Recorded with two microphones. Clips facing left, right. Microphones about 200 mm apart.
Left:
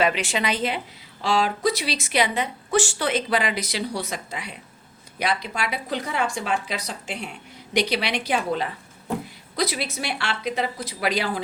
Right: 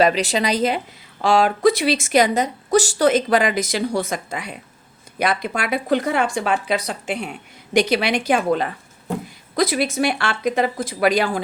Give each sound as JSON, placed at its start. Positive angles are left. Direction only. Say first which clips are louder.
{"t": 0.0, "sound": "a woman's voice", "louder": "right 5 dB", "side_deg": -40}
{"t": 1.2, "sound": "speech", "louder": "right 6 dB", "side_deg": -50}